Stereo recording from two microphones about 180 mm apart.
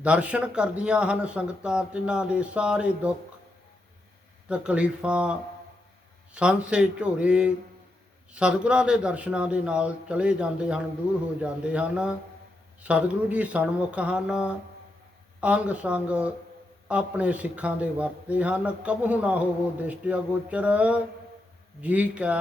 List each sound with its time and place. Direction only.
0.0 s speech: 5° right (ahead or behind)
4.4 s a man's voice: 5° right (ahead or behind)